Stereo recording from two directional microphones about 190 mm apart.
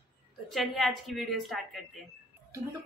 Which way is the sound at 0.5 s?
Centre (ahead or behind).